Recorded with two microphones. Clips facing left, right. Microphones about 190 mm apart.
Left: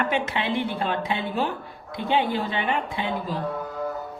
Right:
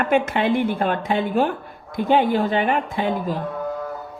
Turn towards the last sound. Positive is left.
turn(degrees=-50)  # may be behind; listen again after turning